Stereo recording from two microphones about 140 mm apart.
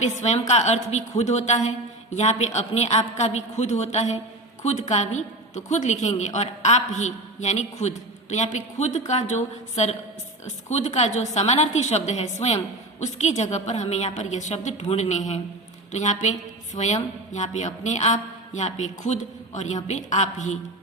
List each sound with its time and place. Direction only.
0.0 s a woman's voice: 55° left (ahead or behind)